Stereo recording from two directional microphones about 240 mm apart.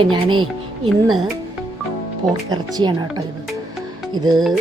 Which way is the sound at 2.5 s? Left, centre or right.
Centre.